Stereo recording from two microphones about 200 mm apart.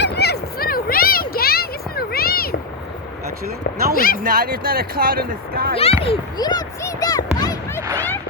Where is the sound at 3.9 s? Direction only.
45° left (ahead or behind).